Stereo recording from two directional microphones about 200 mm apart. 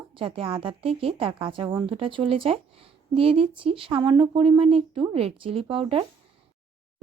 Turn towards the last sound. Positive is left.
turn(degrees=-30)  # may be behind; listen again after turning